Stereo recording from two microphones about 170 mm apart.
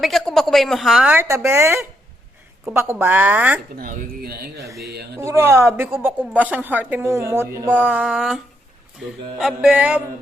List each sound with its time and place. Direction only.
0.0 s a woman's voice: centre (ahead or behind)
3.8 s speech: 60° right (ahead or behind)
5.1 s a woman's voice: 15° right (ahead or behind)
9.4 s a woman's voice: 5° right (ahead or behind)